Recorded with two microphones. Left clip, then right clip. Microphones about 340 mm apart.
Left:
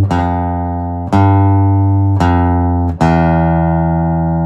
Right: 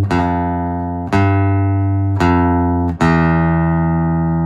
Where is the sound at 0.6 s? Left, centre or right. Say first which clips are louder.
Left 1 dB; left.